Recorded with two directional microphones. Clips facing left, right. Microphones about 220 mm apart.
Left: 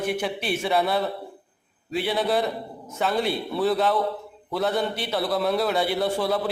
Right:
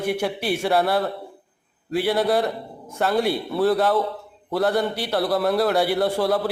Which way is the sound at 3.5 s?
Centre (ahead or behind).